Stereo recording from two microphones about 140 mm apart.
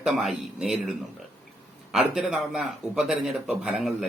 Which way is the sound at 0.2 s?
5° right (ahead or behind).